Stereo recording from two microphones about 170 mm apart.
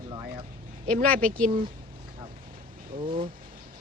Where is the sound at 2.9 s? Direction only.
30° right (ahead or behind).